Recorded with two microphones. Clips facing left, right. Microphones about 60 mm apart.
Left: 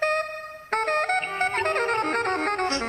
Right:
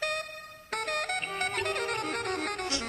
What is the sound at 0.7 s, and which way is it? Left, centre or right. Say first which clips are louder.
Music: left 9 dB; left.